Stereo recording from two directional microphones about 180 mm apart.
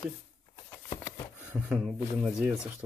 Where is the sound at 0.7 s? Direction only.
20° left (ahead or behind).